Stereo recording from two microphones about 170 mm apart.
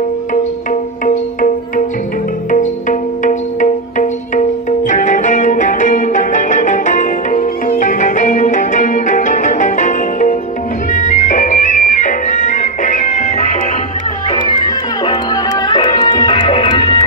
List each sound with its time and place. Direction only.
2.5 s music: 50° left (ahead or behind)
15.7 s music: 30° left (ahead or behind)